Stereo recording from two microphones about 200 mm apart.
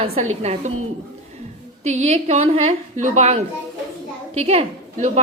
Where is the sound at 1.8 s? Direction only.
35° right (ahead or behind).